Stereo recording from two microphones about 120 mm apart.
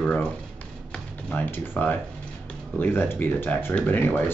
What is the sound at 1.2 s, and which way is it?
Speech, 15° left (ahead or behind).